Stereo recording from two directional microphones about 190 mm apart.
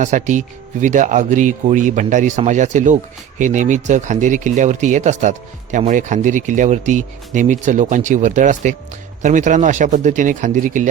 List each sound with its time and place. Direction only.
0.0 s speech: 40° right (ahead or behind)